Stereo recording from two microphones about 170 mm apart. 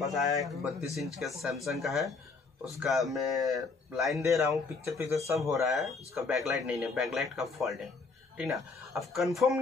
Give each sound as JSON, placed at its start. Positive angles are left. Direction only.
{"t": 0.0, "sound": "speech", "side_deg": 0}
{"t": 4.2, "sound": "speech", "side_deg": -15}
{"t": 5.5, "sound": "speech", "side_deg": 0}
{"t": 8.9, "sound": "speech", "side_deg": 0}